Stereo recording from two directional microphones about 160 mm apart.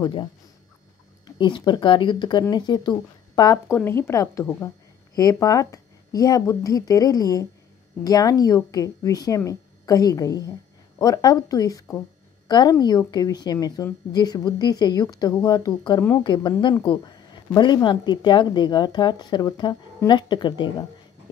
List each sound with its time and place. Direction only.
0.0 s a woman's voice: 30° left (ahead or behind)
3.7 s a woman's voice: 15° left (ahead or behind); by 20.7 s 30° left (ahead or behind)